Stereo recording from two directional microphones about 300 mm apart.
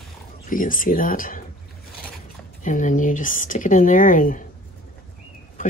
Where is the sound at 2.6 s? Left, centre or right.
Left.